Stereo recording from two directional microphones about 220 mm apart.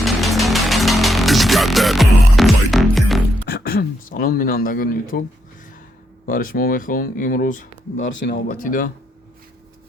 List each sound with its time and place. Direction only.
0.0 s music: centre (ahead or behind)
3.4 s a sound: 45° left (ahead or behind)
6.2 s speech: 40° left (ahead or behind)
8.0 s speech: 55° left (ahead or behind)
8.4 s speech: 40° left (ahead or behind)